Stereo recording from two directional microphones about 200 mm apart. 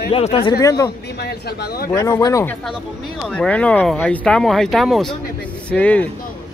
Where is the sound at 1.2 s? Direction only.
50° left (ahead or behind).